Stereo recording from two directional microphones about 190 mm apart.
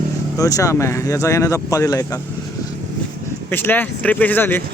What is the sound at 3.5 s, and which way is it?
Speech, 10° left (ahead or behind).